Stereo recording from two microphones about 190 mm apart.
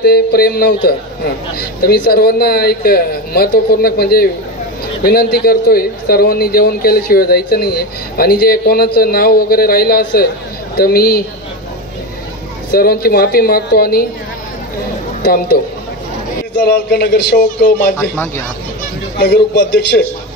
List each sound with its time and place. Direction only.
0.0 s a man's voice: 55° left (ahead or behind)
12.7 s a man's voice: 55° left (ahead or behind)
15.2 s a man's voice: 50° left (ahead or behind)
19.1 s a man's voice: 60° left (ahead or behind)